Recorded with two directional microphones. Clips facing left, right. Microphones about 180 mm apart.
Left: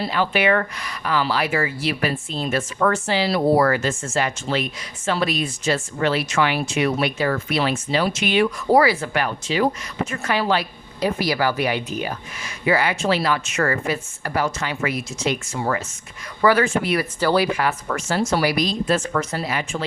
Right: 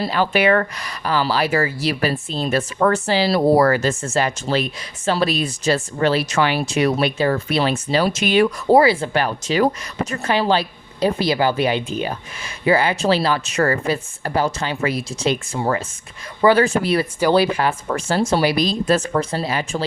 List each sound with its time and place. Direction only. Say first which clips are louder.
0.0 s speech: right 3 dB; 40° right (ahead or behind)
8.7 s speech: right 3 dB; 25° right (ahead or behind)
16.6 s speech: right 3 dB; 35° right (ahead or behind)